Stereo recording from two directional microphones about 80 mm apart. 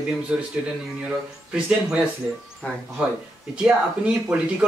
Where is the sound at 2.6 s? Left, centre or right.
Centre.